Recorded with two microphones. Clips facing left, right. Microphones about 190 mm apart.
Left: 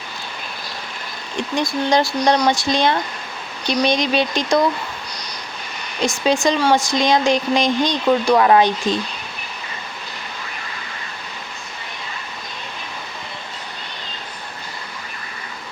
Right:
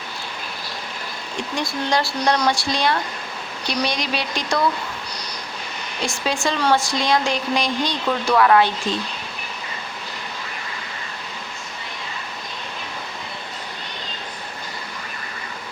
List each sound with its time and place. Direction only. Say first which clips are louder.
1.5 s speech: left 5 dB; 20° left (ahead or behind)
6.0 s speech: left 6 dB; 20° left (ahead or behind)